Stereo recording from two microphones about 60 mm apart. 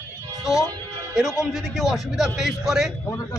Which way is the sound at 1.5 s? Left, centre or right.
Centre.